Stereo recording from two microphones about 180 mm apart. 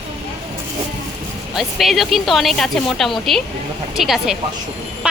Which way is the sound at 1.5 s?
Centre (ahead or behind).